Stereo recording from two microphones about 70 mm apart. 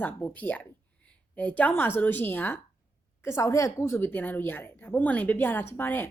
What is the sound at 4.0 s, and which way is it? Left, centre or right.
A woman's voice, left.